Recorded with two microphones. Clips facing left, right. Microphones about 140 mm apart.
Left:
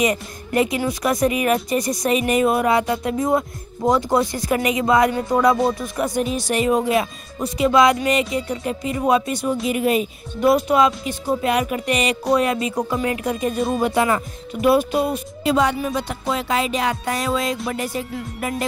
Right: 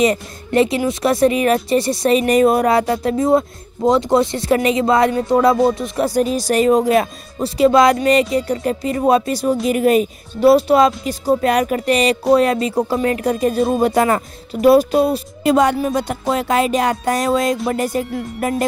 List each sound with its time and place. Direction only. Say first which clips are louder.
0.0 s speech: right 4 dB; 30° right (ahead or behind)
5.5 s music: right 4 dB; centre (ahead or behind)
5.8 s speech: right 5 dB; 30° right (ahead or behind)
9.7 s music: right 5 dB; 45° right (ahead or behind)
10.4 s speech: right 5 dB; 35° right (ahead or behind)
15.4 s music: right 4 dB; 50° right (ahead or behind)